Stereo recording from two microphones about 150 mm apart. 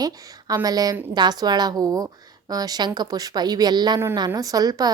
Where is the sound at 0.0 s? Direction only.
25° right (ahead or behind).